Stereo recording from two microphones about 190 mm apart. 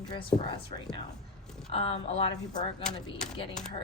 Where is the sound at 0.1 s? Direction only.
25° left (ahead or behind).